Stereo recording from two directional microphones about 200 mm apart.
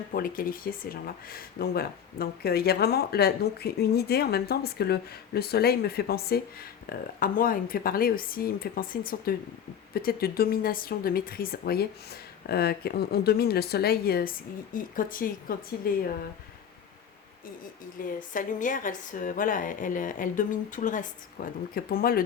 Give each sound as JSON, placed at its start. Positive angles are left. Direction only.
{"t": 0.1, "sound": "speech", "side_deg": 45}
{"t": 18.0, "sound": "a woman's voice", "side_deg": 40}